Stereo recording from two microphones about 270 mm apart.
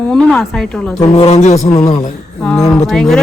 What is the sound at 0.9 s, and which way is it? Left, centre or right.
A man's voice, left.